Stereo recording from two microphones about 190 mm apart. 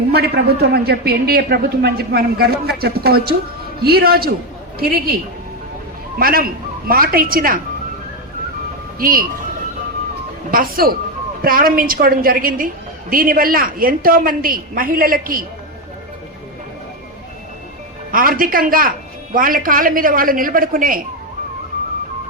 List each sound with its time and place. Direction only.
0.1 s a man's voice: 55° right (ahead or behind)
6.1 s a woman's voice: 50° right (ahead or behind)
9.0 s speech: 50° right (ahead or behind)
10.5 s a woman's voice: 50° right (ahead or behind)
18.1 s a woman's voice: 50° right (ahead or behind)